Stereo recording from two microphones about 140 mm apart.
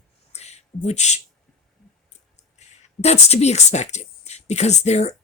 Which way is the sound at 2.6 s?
50° left (ahead or behind).